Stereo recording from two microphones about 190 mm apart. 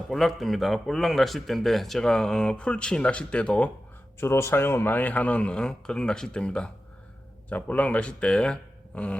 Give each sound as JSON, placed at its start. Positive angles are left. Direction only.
{"t": 0.1, "sound": "speech", "side_deg": 0}